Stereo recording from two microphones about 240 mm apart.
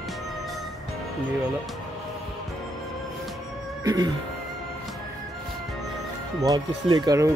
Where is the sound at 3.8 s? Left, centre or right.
Centre.